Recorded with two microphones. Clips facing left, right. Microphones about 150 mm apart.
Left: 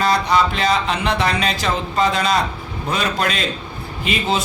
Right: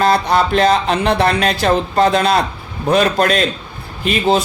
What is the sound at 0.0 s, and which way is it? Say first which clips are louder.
Speech: right 3 dB; 50° right (ahead or behind).